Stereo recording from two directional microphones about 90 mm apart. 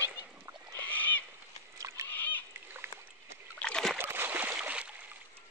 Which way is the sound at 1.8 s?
35° right (ahead or behind).